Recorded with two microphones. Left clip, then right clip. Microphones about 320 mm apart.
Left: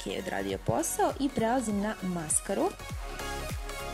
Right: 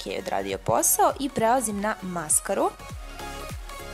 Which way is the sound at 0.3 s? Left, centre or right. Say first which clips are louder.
Right 7 dB; right.